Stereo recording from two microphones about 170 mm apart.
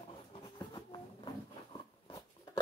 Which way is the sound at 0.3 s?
25° left (ahead or behind).